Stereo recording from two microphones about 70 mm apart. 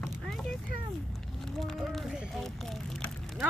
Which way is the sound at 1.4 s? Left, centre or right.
Centre.